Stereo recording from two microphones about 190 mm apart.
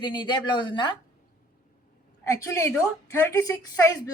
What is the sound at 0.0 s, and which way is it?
Speech, 25° left (ahead or behind).